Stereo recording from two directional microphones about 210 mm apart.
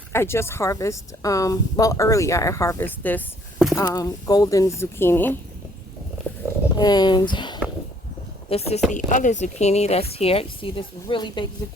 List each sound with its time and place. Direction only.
0.1 s a woman's voice: 10° left (ahead or behind)
6.3 s a sound: 10° left (ahead or behind)
6.7 s speech: 20° left (ahead or behind)